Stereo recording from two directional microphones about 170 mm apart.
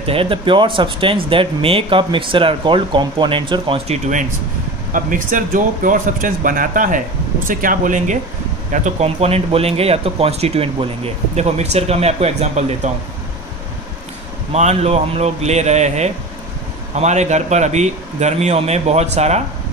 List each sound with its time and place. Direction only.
0.0 s a man's voice: 35° right (ahead or behind)
14.5 s a man's voice: 40° right (ahead or behind)